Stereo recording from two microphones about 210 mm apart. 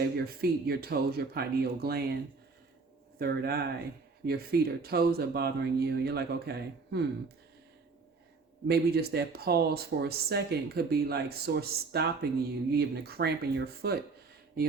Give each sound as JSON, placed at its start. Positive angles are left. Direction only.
{"t": 0.0, "sound": "speech", "side_deg": -45}
{"t": 3.2, "sound": "speech", "side_deg": -50}
{"t": 8.6, "sound": "speech", "side_deg": -50}